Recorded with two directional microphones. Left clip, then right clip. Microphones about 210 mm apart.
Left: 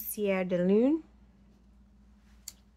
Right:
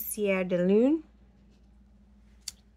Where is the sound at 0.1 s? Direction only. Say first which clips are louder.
Right 2 dB; 10° right (ahead or behind).